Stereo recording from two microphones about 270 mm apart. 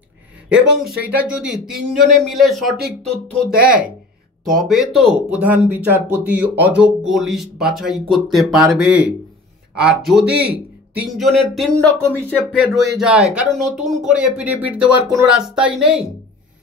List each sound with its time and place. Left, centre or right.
0.5 s speech: centre
3.5 s speech: right
4.5 s speech: centre